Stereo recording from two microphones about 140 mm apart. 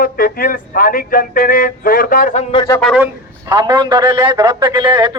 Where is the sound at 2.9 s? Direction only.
15° right (ahead or behind).